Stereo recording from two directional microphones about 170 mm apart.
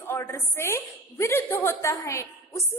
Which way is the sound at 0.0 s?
15° left (ahead or behind).